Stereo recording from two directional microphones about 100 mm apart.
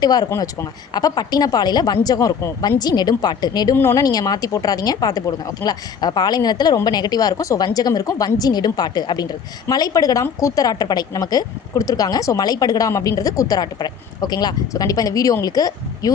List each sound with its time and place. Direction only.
0.0 s a woman's voice: 40° left (ahead or behind)